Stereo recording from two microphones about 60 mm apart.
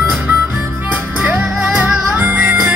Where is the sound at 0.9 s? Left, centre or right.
Right.